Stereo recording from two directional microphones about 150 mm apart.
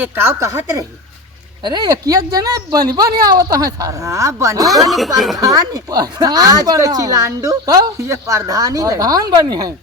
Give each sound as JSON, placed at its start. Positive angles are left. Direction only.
{"t": 0.0, "sound": "a woman's voice", "side_deg": -15}
{"t": 4.9, "sound": "speech", "side_deg": 0}
{"t": 5.4, "sound": "a woman's voice", "side_deg": -25}